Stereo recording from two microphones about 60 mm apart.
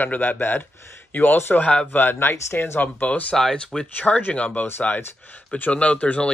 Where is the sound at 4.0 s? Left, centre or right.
Left.